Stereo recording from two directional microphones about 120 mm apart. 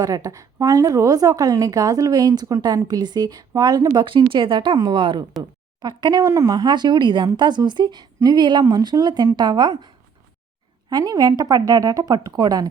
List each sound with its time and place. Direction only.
0.0 s a woman's voice: 30° right (ahead or behind)